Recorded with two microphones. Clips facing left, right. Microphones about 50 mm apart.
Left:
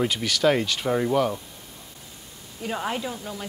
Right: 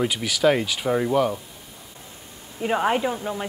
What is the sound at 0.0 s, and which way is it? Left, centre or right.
Speech, centre.